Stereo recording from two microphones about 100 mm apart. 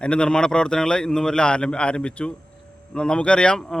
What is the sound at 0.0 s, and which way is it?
A man's voice, 10° left (ahead or behind).